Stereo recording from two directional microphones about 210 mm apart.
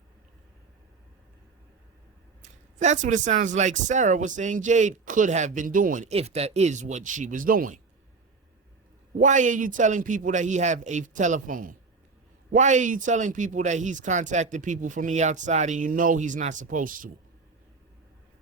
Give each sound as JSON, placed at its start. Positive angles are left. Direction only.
{"t": 2.4, "sound": "speech", "side_deg": -35}
{"t": 9.1, "sound": "speech", "side_deg": -35}